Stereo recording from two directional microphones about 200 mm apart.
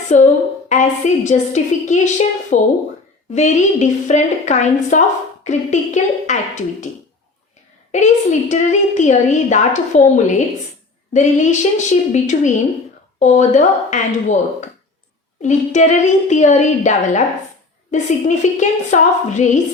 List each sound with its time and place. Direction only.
0.1 s a woman's voice: 35° left (ahead or behind)
7.9 s a woman's voice: 35° left (ahead or behind)